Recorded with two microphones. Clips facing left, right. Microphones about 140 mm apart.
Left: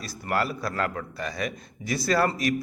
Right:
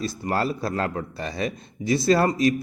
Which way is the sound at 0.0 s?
25° right (ahead or behind).